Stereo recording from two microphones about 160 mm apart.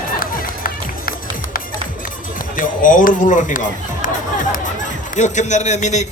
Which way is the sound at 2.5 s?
60° left (ahead or behind).